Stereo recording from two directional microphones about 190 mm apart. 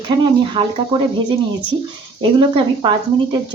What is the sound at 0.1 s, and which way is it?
Speech, 25° right (ahead or behind).